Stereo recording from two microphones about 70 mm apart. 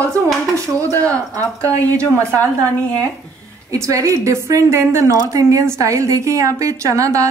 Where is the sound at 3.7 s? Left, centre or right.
Right.